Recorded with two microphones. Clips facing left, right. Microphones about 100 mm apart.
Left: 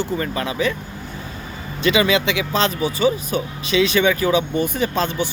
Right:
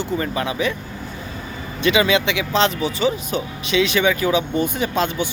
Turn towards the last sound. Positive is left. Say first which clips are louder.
# even
turn(degrees=-15)  # may be behind; listen again after turning